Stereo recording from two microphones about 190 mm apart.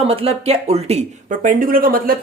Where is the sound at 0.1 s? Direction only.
30° right (ahead or behind).